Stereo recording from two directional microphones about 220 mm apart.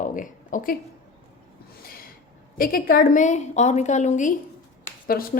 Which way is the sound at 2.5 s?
40° left (ahead or behind).